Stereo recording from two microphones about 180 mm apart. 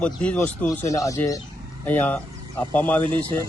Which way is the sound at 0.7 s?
20° left (ahead or behind).